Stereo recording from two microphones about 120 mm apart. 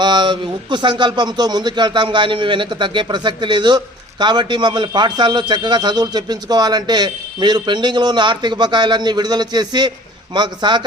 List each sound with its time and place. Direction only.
0.0 s speech: 40° right (ahead or behind)